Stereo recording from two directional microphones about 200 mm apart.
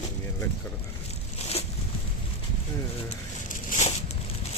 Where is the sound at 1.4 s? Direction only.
30° left (ahead or behind).